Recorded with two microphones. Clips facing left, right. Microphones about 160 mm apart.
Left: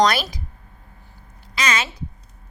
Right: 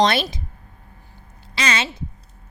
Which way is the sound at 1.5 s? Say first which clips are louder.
Even; 30° right (ahead or behind).